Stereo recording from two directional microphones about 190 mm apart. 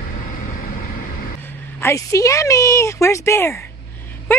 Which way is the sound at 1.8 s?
15° left (ahead or behind).